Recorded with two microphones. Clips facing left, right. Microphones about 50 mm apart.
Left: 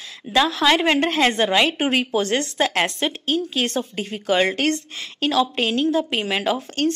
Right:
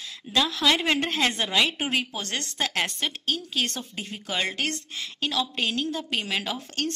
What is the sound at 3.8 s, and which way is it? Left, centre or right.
A woman's voice, left.